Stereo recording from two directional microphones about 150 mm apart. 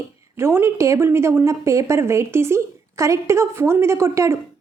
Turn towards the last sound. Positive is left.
turn(degrees=-20)  # may be behind; listen again after turning